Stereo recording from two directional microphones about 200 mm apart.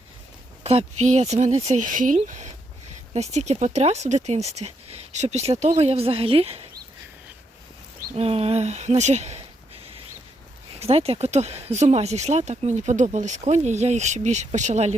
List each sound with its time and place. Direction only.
0.6 s speech: 30° right (ahead or behind)
8.1 s speech: 30° right (ahead or behind)
10.8 s speech: 30° right (ahead or behind)